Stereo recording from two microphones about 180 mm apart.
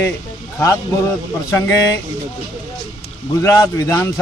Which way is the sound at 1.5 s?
15° left (ahead or behind).